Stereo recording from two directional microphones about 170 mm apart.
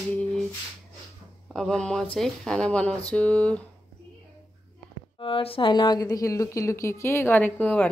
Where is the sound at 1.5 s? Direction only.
5° left (ahead or behind).